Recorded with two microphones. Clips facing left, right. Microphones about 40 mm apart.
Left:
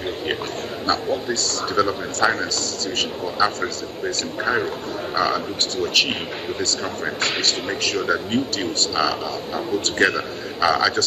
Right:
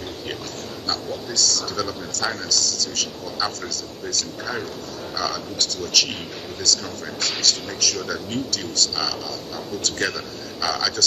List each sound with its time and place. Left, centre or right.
0.8 s a man's voice: left